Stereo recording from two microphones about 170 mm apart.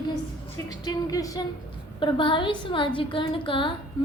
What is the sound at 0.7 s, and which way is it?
A woman's voice, 20° left (ahead or behind).